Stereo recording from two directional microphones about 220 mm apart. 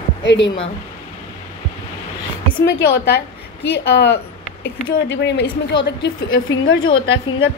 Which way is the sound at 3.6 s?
50° left (ahead or behind).